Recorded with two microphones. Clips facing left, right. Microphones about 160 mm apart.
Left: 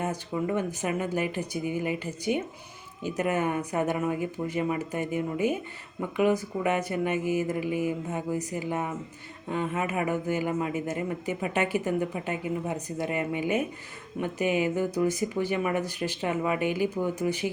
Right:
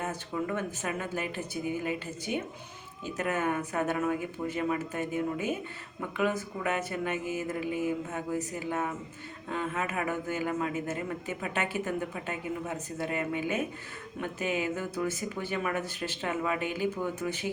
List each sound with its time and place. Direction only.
0.0 s speech: 15° left (ahead or behind)